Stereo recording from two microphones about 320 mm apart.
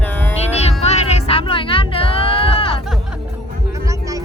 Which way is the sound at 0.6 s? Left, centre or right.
Centre.